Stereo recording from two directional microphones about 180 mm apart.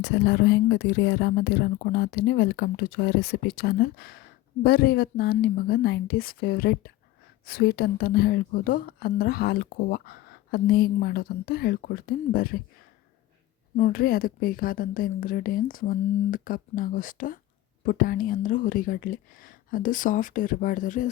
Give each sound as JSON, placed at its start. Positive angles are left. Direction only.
{"t": 0.0, "sound": "a woman's voice", "side_deg": 75}
{"t": 13.7, "sound": "a woman's voice", "side_deg": 50}